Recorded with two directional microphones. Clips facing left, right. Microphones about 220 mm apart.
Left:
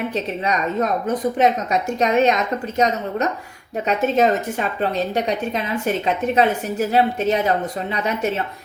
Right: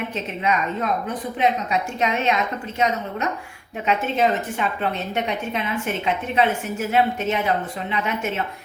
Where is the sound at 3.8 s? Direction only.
40° left (ahead or behind).